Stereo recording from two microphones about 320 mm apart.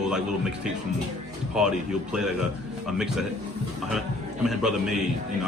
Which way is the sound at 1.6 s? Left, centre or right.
Centre.